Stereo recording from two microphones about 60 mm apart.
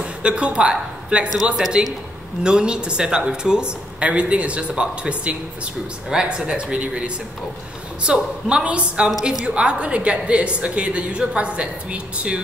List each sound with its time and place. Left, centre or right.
0.0 s a woman's voice: centre